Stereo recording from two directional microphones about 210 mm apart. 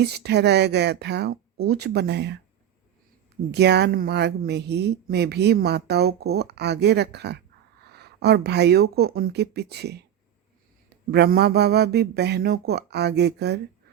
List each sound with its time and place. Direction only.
0.0 s a woman's voice: 50° right (ahead or behind)
3.5 s a woman's voice: 50° right (ahead or behind)